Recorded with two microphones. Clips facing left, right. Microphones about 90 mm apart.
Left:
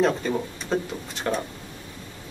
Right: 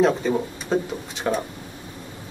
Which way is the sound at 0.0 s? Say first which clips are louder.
Right 3 dB; 5° right (ahead or behind).